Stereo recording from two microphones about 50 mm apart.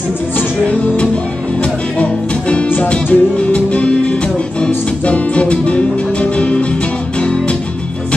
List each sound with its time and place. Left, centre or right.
1.6 s music: left